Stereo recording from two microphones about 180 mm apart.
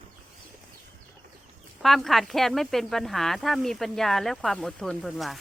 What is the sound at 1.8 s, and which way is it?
Speech, centre (ahead or behind).